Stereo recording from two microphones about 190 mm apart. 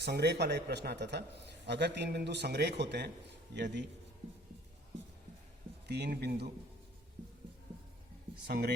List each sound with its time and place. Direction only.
0.0 s a man's voice: 60° right (ahead or behind)
5.9 s a man's voice: 60° right (ahead or behind)
8.4 s a man's voice: 60° right (ahead or behind)